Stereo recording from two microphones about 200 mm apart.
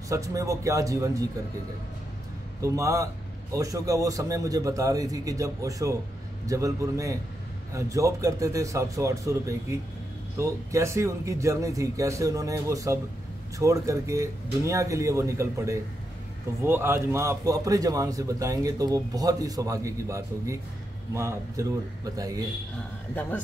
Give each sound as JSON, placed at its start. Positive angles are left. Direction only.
{"t": 0.1, "sound": "a man's voice", "side_deg": -15}
{"t": 2.6, "sound": "a man's voice", "side_deg": -15}